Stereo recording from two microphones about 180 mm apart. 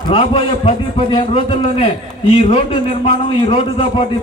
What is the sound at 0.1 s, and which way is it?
Speech, 30° left (ahead or behind).